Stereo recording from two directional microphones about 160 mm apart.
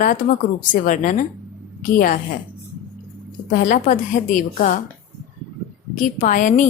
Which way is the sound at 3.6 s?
55° left (ahead or behind).